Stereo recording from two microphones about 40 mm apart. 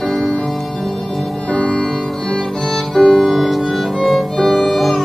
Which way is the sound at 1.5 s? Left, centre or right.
Left.